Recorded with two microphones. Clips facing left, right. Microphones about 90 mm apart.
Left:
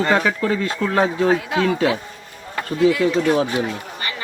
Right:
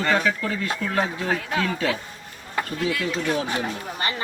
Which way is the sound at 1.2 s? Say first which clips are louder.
Left 7 dB; 20° left (ahead or behind).